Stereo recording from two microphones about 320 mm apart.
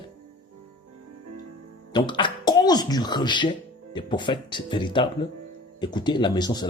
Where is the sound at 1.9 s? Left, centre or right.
Centre.